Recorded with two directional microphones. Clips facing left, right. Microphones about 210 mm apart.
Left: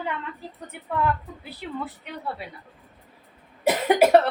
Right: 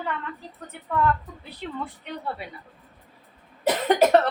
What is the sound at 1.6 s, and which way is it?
Speech, 10° left (ahead or behind).